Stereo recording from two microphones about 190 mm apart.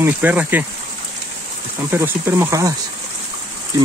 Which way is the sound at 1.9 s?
10° right (ahead or behind).